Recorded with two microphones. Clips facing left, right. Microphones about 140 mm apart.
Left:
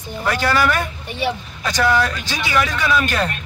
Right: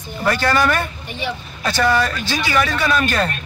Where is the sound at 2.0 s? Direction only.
15° left (ahead or behind).